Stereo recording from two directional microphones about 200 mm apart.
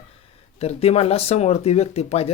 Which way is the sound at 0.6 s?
30° left (ahead or behind).